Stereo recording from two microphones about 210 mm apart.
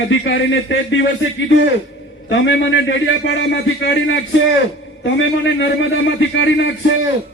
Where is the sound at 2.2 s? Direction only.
60° left (ahead or behind).